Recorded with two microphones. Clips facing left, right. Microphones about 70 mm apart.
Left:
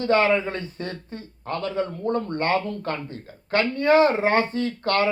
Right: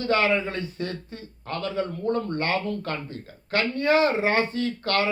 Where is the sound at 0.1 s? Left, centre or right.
Left.